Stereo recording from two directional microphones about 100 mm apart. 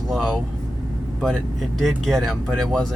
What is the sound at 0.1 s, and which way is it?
Speech, 5° left (ahead or behind).